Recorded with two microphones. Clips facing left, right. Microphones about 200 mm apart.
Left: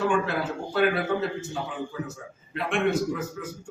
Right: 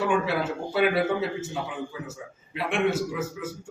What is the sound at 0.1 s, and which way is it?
A man's voice, 5° right (ahead or behind).